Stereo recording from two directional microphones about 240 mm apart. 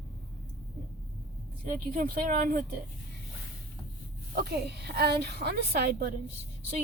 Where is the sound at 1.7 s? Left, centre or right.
Right.